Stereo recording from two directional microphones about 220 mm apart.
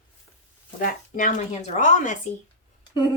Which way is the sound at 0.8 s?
35° left (ahead or behind).